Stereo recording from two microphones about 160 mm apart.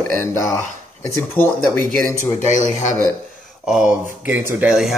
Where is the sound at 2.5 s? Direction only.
50° left (ahead or behind).